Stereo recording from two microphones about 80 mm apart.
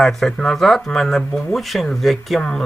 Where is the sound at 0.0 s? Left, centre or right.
Centre.